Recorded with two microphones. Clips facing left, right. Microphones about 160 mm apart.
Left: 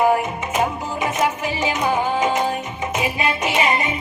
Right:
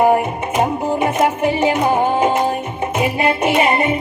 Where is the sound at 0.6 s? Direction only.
55° right (ahead or behind).